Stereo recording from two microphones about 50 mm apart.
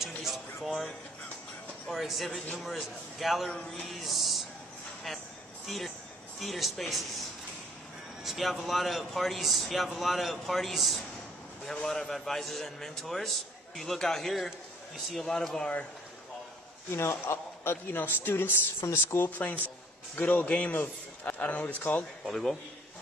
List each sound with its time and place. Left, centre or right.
0.0 s a sound: centre
1.9 s a man's voice: centre
3.8 s music: centre
5.7 s a man's voice: centre
11.7 s a man's voice: centre
17.1 s a man's voice: left
19.3 s a man's voice: left
22.2 s a man's voice: centre